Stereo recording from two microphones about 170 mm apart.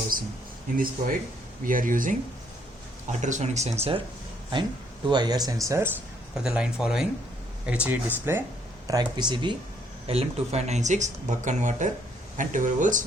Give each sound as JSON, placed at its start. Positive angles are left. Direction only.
{"t": 1.0, "sound": "speech", "side_deg": -55}
{"t": 5.0, "sound": "speech", "side_deg": -25}
{"t": 6.3, "sound": "speech", "side_deg": -5}
{"t": 8.9, "sound": "speech", "side_deg": -25}
{"t": 10.1, "sound": "speech", "side_deg": -40}